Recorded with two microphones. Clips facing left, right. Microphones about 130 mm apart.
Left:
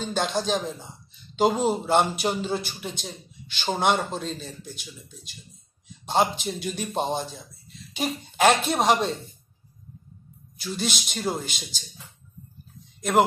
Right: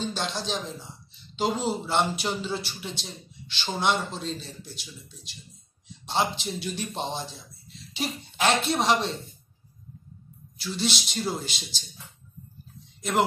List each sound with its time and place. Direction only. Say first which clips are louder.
0.0 s a man's voice: left 5 dB; 50° left (ahead or behind)
6.0 s a man's voice: left 4 dB; 50° left (ahead or behind)
10.9 s a man's voice: left 2 dB; 50° left (ahead or behind)